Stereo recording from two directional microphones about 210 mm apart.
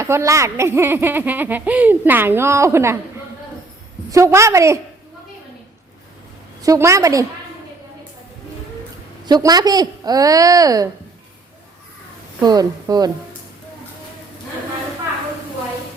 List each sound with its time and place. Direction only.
0.0 s a child's voice: 15° right (ahead or behind)
4.1 s a child's voice: 15° right (ahead or behind)
6.6 s a child's voice: 15° right (ahead or behind)
9.2 s a child's voice: 20° right (ahead or behind)
12.4 s a woman's voice: 20° right (ahead or behind)